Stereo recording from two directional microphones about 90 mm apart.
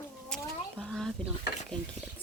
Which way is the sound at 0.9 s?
5° left (ahead or behind).